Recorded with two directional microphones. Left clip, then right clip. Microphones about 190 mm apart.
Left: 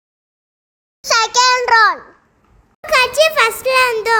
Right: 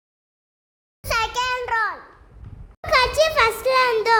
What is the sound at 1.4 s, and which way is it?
Child singing, 25° left (ahead or behind).